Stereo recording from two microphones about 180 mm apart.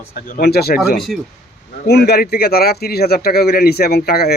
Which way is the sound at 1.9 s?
65° left (ahead or behind).